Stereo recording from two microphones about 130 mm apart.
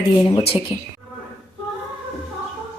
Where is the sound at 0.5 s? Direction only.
40° left (ahead or behind).